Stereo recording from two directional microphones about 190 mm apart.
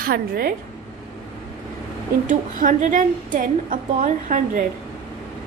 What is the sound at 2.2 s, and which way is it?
A woman's voice, 40° right (ahead or behind).